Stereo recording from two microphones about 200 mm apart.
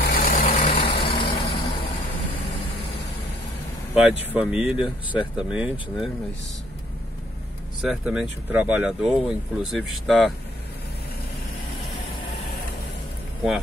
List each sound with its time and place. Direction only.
0.0 s vehicle: 45° left (ahead or behind)
0.7 s vehicle: 25° left (ahead or behind)
3.9 s speech: 5° right (ahead or behind)
7.8 s speech: 5° right (ahead or behind)